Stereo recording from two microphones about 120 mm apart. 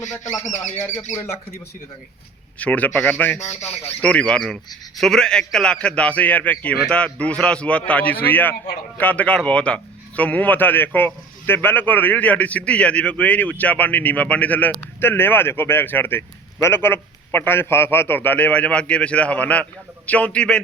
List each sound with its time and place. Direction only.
1.1 s speech: 20° left (ahead or behind)
2.6 s a man's voice: 10° left (ahead or behind)